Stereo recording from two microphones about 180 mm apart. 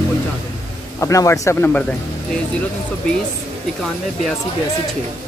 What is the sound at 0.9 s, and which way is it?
Speech, 15° left (ahead or behind).